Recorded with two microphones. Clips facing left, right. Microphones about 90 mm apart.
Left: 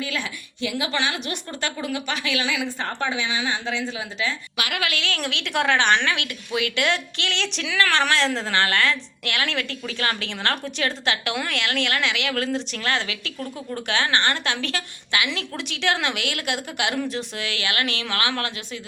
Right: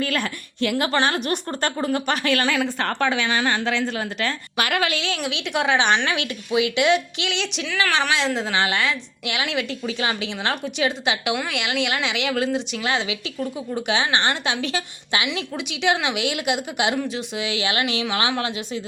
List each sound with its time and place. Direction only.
0.0 s a woman's voice: 55° right (ahead or behind)
0.9 s a woman's voice: 45° right (ahead or behind); by 4.4 s 60° right (ahead or behind)
4.5 s a woman's voice: 45° right (ahead or behind)
4.8 s a woman's voice: 25° right (ahead or behind)
5.1 s a woman's voice: 10° right (ahead or behind)
6.1 s a woman's voice: 25° right (ahead or behind)
15.3 s a woman's voice: 10° right (ahead or behind)
17.0 s speech: 5° right (ahead or behind)
17.4 s a woman's voice: 15° right (ahead or behind)